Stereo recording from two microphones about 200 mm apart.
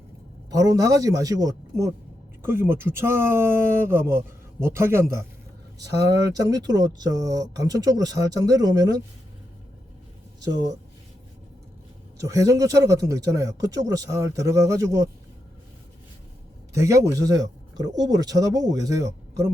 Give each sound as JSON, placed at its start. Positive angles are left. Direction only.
{"t": 0.5, "sound": "a man's voice", "side_deg": -15}
{"t": 10.4, "sound": "speech", "side_deg": -20}
{"t": 12.1, "sound": "a man's voice", "side_deg": -15}
{"t": 16.7, "sound": "a man's voice", "side_deg": -15}